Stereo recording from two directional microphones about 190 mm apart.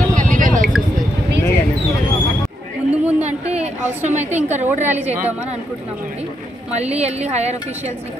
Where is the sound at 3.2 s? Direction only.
35° right (ahead or behind).